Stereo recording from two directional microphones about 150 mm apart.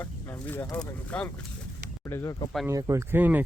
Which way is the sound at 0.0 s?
15° left (ahead or behind).